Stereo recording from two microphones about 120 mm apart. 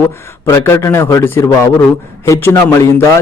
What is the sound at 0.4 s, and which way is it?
A man's voice, 20° left (ahead or behind).